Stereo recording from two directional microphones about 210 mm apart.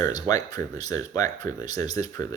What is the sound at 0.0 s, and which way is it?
Speech, 15° left (ahead or behind).